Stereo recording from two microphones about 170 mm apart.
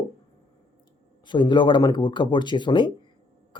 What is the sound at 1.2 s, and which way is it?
Speech, 25° left (ahead or behind).